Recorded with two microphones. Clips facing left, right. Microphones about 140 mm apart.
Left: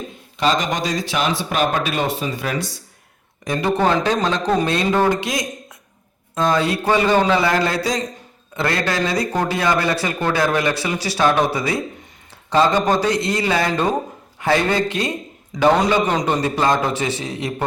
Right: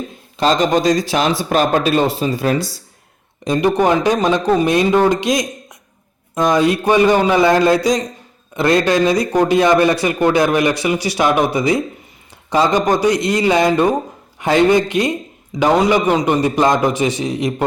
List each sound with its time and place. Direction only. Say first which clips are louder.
0.3 s speech: right 5 dB; 35° right (ahead or behind)
3.4 s speech: right 4 dB; 20° right (ahead or behind)